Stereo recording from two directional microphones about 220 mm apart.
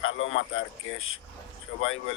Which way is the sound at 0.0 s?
60° left (ahead or behind).